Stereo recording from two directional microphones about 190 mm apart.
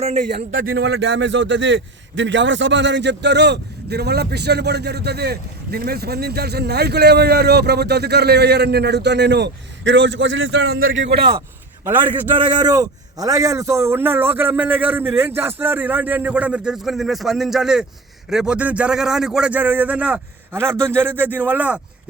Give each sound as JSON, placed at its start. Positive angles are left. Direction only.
{"t": 0.3, "sound": "speech", "side_deg": -60}
{"t": 11.2, "sound": "a man's voice", "side_deg": -25}
{"t": 11.9, "sound": "a man's voice", "side_deg": -10}
{"t": 12.4, "sound": "a man's voice", "side_deg": -25}